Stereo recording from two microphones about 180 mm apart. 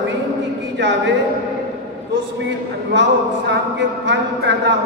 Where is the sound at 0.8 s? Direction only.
75° right (ahead or behind).